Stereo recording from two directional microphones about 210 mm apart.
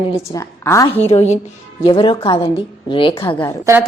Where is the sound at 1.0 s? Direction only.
30° left (ahead or behind).